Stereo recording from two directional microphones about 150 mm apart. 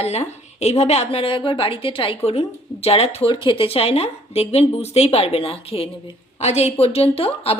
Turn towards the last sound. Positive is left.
turn(degrees=40)  # may be behind; listen again after turning